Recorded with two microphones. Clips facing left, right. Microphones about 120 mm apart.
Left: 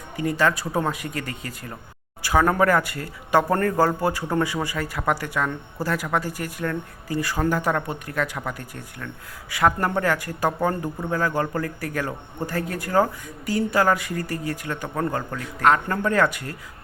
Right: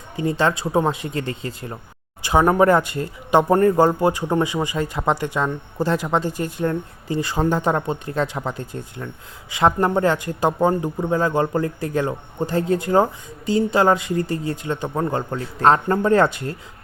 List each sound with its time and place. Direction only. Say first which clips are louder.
0.2 s speech: right 2 dB; 25° right (ahead or behind)